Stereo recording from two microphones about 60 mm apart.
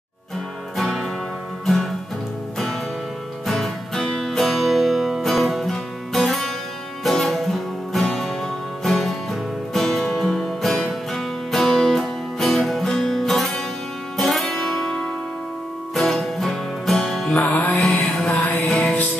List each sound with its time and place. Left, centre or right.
0.7 s music: centre
3.4 s music: centre
17.4 s music: left
18.2 s music: centre